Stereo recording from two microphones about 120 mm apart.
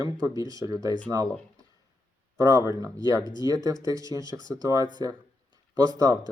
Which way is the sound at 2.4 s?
25° right (ahead or behind).